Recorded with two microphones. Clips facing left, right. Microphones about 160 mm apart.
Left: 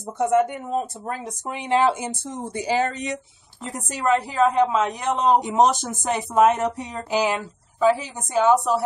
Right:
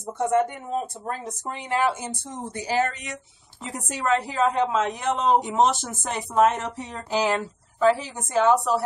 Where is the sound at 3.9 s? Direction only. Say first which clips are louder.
Left 3 dB; 10° left (ahead or behind).